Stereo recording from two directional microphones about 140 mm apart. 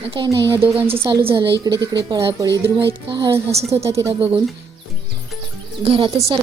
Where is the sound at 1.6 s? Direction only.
25° right (ahead or behind).